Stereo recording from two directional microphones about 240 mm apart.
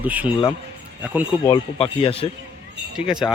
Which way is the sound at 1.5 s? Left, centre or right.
Left.